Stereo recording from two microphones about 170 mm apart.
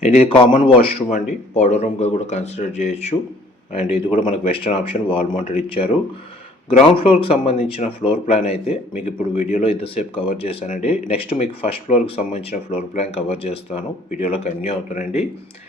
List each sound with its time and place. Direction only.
0.0 s speech: 35° left (ahead or behind)